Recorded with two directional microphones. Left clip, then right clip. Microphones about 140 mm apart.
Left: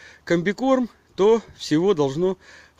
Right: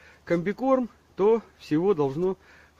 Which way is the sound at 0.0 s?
30° left (ahead or behind).